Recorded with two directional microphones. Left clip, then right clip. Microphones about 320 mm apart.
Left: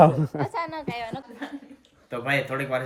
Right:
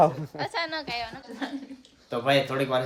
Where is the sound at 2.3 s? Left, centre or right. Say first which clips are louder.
Right 2 dB; centre.